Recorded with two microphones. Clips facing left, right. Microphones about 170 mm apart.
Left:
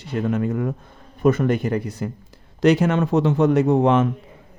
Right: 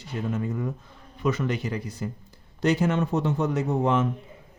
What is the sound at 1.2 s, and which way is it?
Speech, 50° left (ahead or behind).